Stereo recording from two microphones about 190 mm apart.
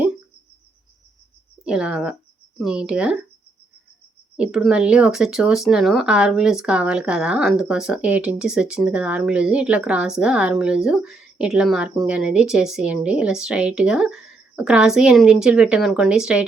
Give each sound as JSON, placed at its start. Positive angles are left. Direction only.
{"t": 1.6, "sound": "speech", "side_deg": -5}
{"t": 4.4, "sound": "speech", "side_deg": -5}